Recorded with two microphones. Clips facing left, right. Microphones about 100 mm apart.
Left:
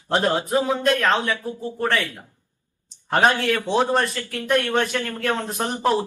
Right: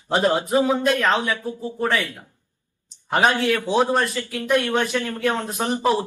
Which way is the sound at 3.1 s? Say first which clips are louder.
Even; 5° right (ahead or behind).